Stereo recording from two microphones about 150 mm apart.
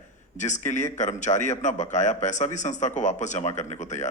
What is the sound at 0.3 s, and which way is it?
A man's voice, 55° left (ahead or behind).